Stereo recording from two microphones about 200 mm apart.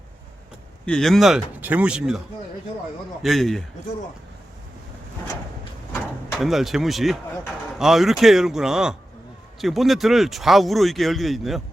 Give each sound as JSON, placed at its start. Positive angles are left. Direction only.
{"t": 0.9, "sound": "speech", "side_deg": 0}
{"t": 3.2, "sound": "speech", "side_deg": 0}
{"t": 5.9, "sound": "a sound", "side_deg": 15}
{"t": 6.4, "sound": "speech", "side_deg": 0}